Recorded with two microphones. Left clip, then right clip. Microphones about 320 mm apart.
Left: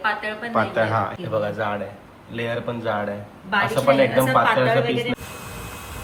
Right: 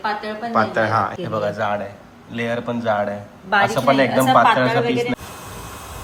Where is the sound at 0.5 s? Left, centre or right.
Centre.